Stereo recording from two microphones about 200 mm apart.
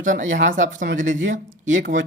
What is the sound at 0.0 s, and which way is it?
Speech, 40° right (ahead or behind).